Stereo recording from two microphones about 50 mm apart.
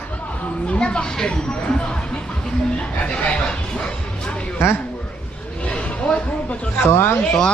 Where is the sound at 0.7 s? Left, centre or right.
Centre.